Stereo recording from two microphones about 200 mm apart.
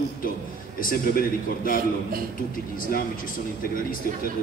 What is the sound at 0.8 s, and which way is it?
A man's voice, 45° left (ahead or behind).